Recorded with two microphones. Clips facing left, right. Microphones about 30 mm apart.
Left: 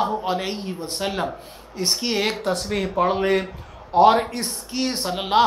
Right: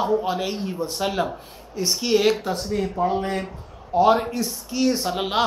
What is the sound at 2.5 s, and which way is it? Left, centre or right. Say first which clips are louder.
Speech: left 2 dB; left.